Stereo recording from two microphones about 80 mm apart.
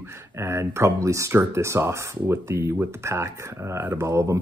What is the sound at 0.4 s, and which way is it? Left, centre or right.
Speech, right.